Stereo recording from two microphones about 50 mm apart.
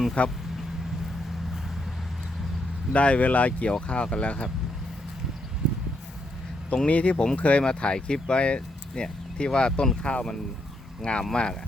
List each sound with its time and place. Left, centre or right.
0.2 s speech: left
2.9 s speech: left
6.8 s speech: left